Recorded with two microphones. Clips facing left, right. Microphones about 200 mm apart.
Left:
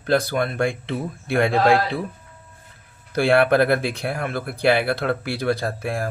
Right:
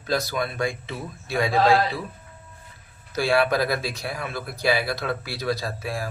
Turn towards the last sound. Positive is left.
turn(degrees=55)  # may be behind; listen again after turning